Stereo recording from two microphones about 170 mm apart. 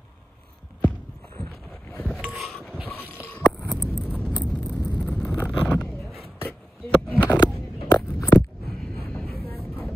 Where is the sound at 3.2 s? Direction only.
25° left (ahead or behind).